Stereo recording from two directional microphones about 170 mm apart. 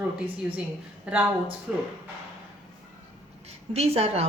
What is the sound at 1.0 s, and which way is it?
Speech, 10° right (ahead or behind).